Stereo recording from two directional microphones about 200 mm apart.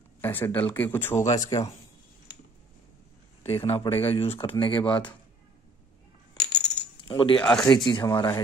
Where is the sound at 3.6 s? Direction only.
30° left (ahead or behind).